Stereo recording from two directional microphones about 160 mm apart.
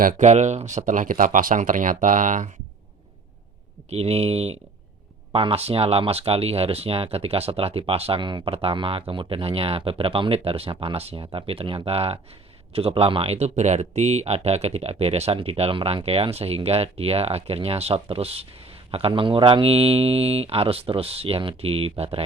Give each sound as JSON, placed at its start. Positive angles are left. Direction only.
{"t": 0.0, "sound": "speech", "side_deg": -55}
{"t": 3.8, "sound": "speech", "side_deg": -40}